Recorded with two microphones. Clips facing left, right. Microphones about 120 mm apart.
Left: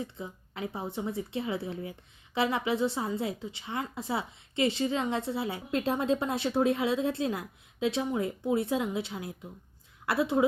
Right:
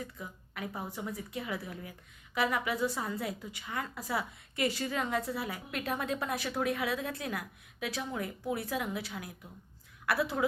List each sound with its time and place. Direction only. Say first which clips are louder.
0.0 s speech: left 5 dB; 25° left (ahead or behind)